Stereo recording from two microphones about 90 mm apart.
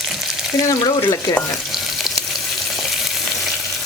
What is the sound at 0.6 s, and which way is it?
Speech, 40° left (ahead or behind).